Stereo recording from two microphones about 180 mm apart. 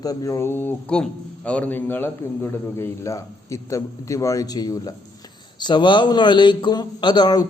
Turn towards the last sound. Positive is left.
turn(degrees=25)  # may be behind; listen again after turning